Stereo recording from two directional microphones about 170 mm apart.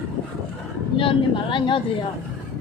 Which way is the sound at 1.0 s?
30° left (ahead or behind).